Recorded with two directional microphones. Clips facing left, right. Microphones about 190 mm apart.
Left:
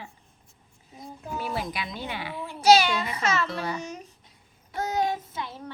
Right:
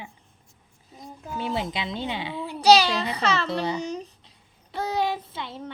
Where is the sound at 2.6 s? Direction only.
35° right (ahead or behind).